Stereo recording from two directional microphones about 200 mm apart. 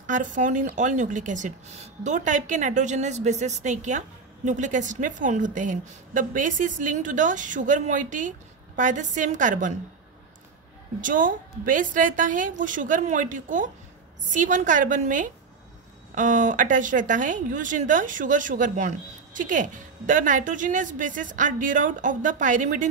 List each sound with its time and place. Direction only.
0.0 s a woman's voice: 40° right (ahead or behind)
11.0 s a woman's voice: 40° right (ahead or behind)